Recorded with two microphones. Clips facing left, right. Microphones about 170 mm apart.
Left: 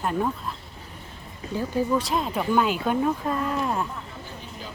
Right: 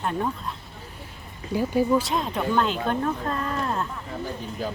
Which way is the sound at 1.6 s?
10° right (ahead or behind).